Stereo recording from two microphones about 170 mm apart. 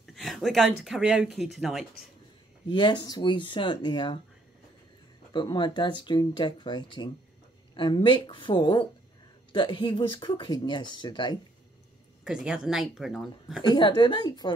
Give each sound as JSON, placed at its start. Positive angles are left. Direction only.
{"t": 0.0, "sound": "speech", "side_deg": 0}
{"t": 2.7, "sound": "speech", "side_deg": 25}
{"t": 5.3, "sound": "speech", "side_deg": 25}
{"t": 12.3, "sound": "speech", "side_deg": -5}
{"t": 13.6, "sound": "speech", "side_deg": 30}